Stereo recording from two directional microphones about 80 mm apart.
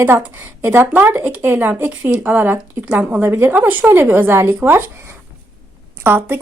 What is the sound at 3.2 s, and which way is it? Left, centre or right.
Speech, right.